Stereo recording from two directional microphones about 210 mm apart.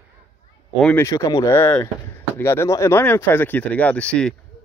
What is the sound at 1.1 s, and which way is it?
Speech, 15° left (ahead or behind).